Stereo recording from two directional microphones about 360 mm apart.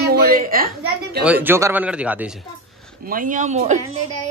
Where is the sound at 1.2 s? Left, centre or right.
Centre.